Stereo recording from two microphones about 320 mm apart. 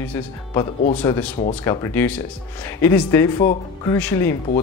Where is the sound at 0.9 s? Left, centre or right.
Centre.